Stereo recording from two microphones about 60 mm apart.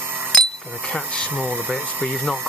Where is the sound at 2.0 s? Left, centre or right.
Left.